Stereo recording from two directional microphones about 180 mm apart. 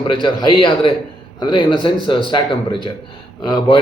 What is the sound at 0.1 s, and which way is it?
A man's voice, 25° left (ahead or behind).